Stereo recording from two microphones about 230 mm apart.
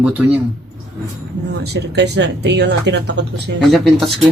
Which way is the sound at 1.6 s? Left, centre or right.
Right.